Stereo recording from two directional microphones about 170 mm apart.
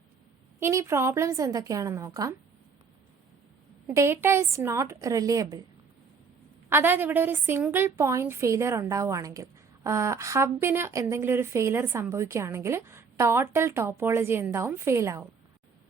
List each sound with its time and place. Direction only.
0.6 s a woman's voice: 15° right (ahead or behind)
3.8 s a woman's voice: 15° right (ahead or behind)
6.7 s a woman's voice: 15° right (ahead or behind)